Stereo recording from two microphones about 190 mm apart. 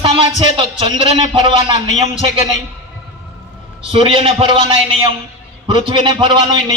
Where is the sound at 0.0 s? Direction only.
30° right (ahead or behind).